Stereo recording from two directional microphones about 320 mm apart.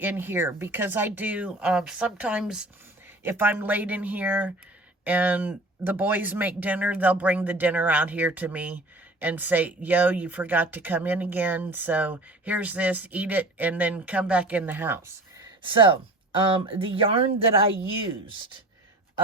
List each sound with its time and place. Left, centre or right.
0.0 s speech: centre